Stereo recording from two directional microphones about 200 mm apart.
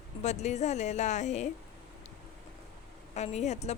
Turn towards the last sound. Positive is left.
turn(degrees=35)  # may be behind; listen again after turning